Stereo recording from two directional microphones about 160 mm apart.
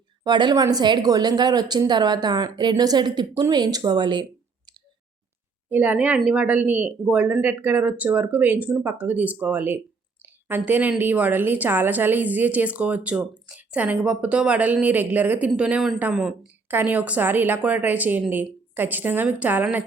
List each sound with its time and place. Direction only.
0.3 s a woman's voice: 25° right (ahead or behind)
5.7 s a woman's voice: 10° right (ahead or behind)